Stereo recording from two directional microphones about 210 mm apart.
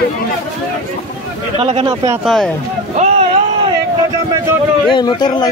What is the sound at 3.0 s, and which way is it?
Speech, 35° right (ahead or behind).